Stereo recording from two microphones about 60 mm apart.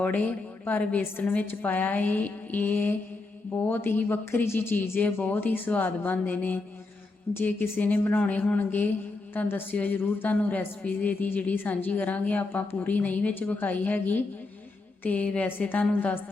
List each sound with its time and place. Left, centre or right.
0.0 s a woman's voice: left